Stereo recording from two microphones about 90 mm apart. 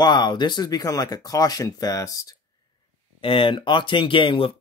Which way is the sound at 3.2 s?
80° left.